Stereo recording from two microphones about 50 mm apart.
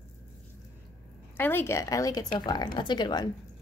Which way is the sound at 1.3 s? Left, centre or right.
Left.